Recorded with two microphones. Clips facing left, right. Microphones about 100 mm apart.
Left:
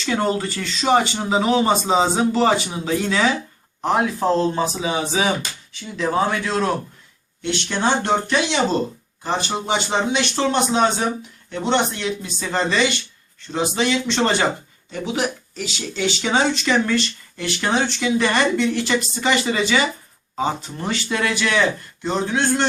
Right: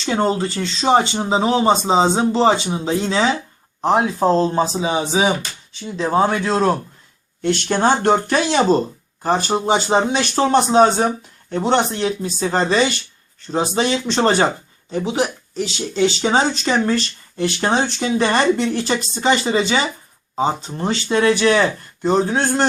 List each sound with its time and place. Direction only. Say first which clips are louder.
0.0 s speech: right 2 dB; 25° right (ahead or behind)
7.4 s speech: right 5 dB; 45° right (ahead or behind)